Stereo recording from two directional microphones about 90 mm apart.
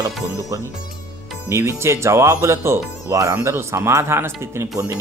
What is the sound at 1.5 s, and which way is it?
Speech, 30° right (ahead or behind).